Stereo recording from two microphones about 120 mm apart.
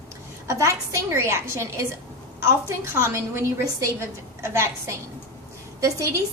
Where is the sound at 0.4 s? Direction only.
25° right (ahead or behind).